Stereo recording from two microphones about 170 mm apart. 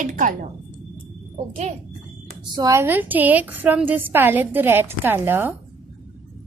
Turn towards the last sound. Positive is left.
turn(degrees=-10)  # may be behind; listen again after turning